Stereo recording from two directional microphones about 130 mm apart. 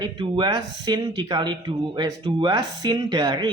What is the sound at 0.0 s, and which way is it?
Speech, 35° right (ahead or behind).